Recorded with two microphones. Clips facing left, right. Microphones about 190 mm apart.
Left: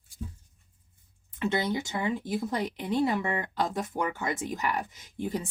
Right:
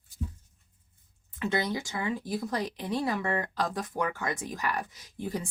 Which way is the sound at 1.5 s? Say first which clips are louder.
Even; 25° left (ahead or behind).